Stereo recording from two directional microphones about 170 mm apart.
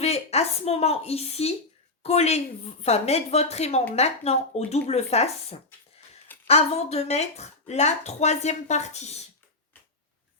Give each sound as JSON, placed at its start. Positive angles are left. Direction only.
{"t": 0.0, "sound": "a woman's voice", "side_deg": 40}